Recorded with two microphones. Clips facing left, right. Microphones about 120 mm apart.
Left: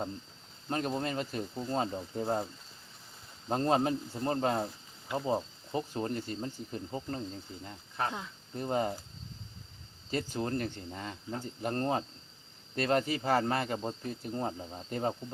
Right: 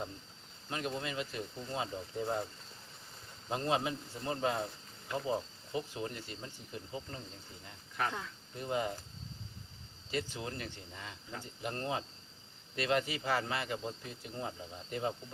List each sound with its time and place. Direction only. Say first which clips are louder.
0.7 s speech: left 5 dB; 40° left (ahead or behind)
3.5 s speech: left 5 dB; 40° left (ahead or behind)
8.0 s speech: left 2 dB; 30° left (ahead or behind)
8.5 s speech: left 4 dB; 40° left (ahead or behind)
10.1 s speech: left 5 dB; 45° left (ahead or behind)